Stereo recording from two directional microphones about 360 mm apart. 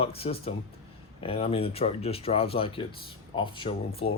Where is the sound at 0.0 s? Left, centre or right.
Centre.